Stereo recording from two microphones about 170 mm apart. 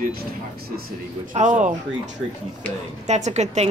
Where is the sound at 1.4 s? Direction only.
45° right (ahead or behind).